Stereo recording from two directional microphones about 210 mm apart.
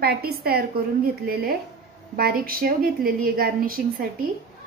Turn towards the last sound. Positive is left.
turn(degrees=-45)  # may be behind; listen again after turning